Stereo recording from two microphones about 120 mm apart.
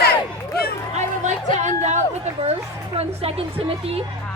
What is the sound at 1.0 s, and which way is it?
Chatter, 80° right.